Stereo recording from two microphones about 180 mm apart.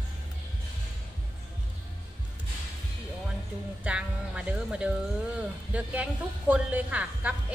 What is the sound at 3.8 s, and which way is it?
Music, 5° right (ahead or behind).